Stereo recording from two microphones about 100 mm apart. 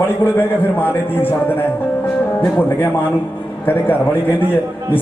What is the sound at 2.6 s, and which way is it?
Speech, 20° left (ahead or behind).